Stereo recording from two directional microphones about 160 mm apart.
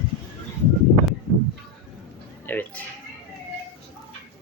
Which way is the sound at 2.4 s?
10° left (ahead or behind).